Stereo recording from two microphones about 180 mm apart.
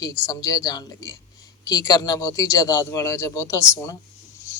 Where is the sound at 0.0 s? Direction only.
20° left (ahead or behind).